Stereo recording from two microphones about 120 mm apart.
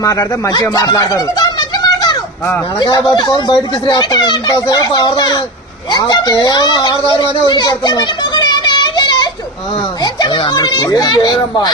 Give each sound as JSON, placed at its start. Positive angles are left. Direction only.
{"t": 0.0, "sound": "speech", "side_deg": 30}
{"t": 7.2, "sound": "children playing", "side_deg": 35}
{"t": 10.0, "sound": "speech", "side_deg": 40}